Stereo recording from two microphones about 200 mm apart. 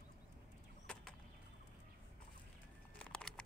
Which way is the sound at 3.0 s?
5° left (ahead or behind).